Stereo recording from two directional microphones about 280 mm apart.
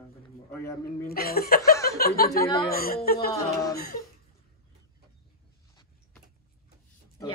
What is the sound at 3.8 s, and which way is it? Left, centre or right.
Speech, left.